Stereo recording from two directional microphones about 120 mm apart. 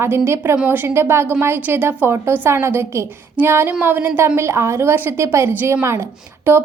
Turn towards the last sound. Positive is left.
turn(degrees=-20)  # may be behind; listen again after turning